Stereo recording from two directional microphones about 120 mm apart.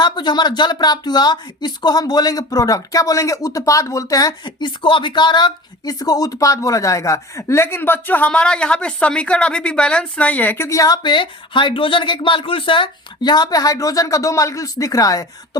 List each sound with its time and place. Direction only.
0.0 s speech: 35° left (ahead or behind); by 10.7 s 15° left (ahead or behind)
10.7 s speech: 30° left (ahead or behind)